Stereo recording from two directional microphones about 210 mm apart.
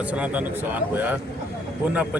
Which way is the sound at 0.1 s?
5° right (ahead or behind).